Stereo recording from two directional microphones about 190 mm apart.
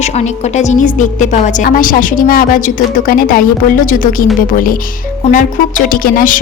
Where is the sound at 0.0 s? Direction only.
35° left (ahead or behind).